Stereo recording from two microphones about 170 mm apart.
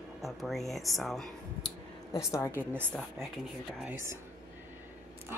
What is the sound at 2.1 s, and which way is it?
Speech, 15° left (ahead or behind).